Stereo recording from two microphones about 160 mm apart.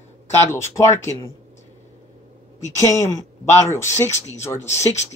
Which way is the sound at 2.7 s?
20° left (ahead or behind).